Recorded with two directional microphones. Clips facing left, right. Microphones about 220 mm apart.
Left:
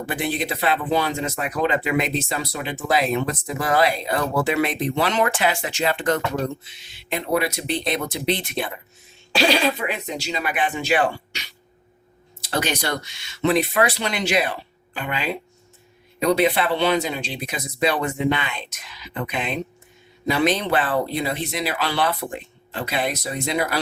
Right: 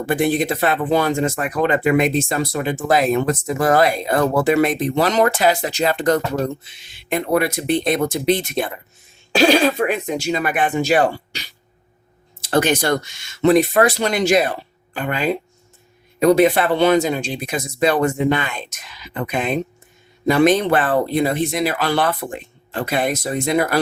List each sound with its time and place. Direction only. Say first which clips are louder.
0.1 s speech: right 8 dB; 45° right (ahead or behind)
6.7 s speech: right 5 dB; 50° right (ahead or behind)
12.5 s speech: right 7 dB; 50° right (ahead or behind)